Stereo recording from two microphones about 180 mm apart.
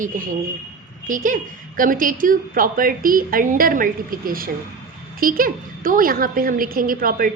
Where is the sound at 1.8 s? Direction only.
50° right (ahead or behind).